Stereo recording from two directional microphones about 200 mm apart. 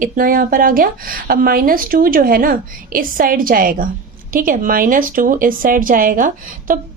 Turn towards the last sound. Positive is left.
turn(degrees=-45)  # may be behind; listen again after turning